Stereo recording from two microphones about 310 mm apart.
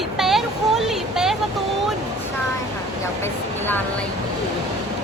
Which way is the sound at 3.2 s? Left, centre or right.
Centre.